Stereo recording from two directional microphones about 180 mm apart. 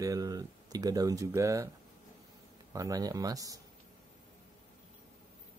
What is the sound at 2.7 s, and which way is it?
Speech, 20° right (ahead or behind).